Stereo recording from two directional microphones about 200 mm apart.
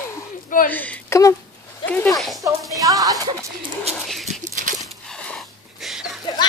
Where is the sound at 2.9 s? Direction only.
15° right (ahead or behind).